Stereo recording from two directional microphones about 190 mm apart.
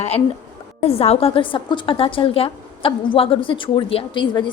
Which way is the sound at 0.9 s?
30° left (ahead or behind).